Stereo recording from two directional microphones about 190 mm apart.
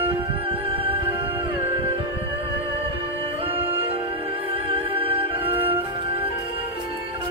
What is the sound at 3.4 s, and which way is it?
Music, 30° right (ahead or behind).